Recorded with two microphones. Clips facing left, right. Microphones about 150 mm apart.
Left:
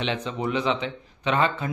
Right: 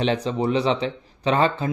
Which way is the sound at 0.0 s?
40° right (ahead or behind).